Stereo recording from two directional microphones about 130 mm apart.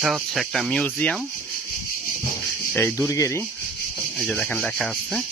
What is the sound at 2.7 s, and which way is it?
Speech, 20° left (ahead or behind).